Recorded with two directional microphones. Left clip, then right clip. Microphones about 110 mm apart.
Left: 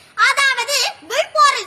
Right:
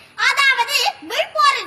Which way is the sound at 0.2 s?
50° left (ahead or behind).